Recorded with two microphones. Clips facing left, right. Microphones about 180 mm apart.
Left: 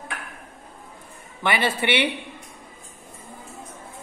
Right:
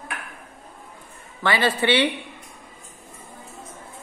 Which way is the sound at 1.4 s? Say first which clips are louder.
Right 2 dB; 20° left (ahead or behind).